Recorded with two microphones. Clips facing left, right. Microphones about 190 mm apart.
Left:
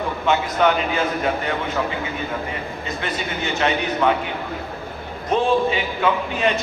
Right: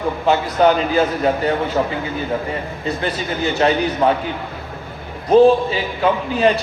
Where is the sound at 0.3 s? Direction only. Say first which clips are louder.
Right 4 dB; 35° right (ahead or behind).